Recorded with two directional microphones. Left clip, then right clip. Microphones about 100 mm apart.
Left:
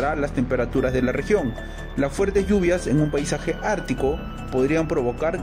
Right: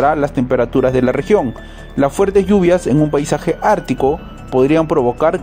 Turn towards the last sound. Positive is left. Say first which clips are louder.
# right 9 dB
turn(degrees=-60)  # may be behind; listen again after turning